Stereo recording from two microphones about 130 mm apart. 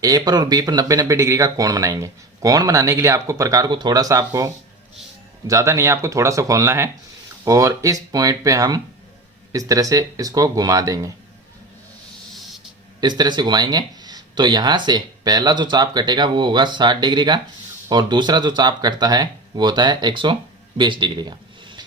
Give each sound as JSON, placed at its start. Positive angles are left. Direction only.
{"t": 0.0, "sound": "speech", "side_deg": -30}
{"t": 13.0, "sound": "speech", "side_deg": -35}
{"t": 20.7, "sound": "a sound", "side_deg": -40}